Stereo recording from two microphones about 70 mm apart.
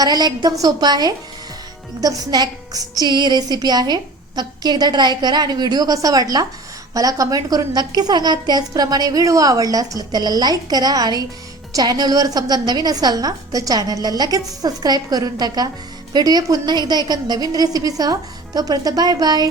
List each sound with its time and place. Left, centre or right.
0.0 s a woman's voice: right
2.0 s a woman's voice: right
17.1 s a woman's voice: right